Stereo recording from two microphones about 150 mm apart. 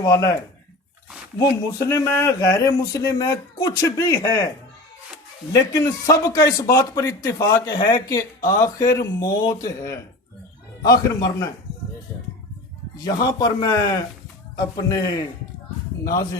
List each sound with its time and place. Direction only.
0.0 s speech: 25° left (ahead or behind)
1.4 s speech: 20° left (ahead or behind)
5.5 s speech: 20° left (ahead or behind)
13.1 s speech: 25° left (ahead or behind)